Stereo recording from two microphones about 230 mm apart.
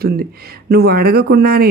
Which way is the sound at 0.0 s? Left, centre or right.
Right.